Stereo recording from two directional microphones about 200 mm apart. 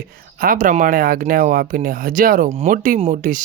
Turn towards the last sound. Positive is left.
turn(degrees=-40)  # may be behind; listen again after turning